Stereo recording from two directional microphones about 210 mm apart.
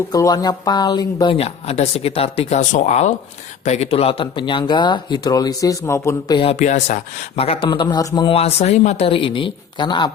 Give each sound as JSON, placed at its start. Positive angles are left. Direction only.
{"t": 0.1, "sound": "speech", "side_deg": 20}